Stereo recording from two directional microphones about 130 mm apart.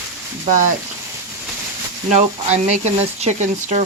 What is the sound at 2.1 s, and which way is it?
Speech, 60° right (ahead or behind).